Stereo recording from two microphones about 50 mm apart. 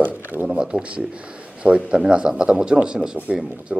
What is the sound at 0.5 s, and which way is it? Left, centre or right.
A man's voice, right.